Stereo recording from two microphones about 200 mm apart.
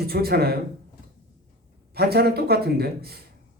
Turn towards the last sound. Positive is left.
turn(degrees=-50)  # may be behind; listen again after turning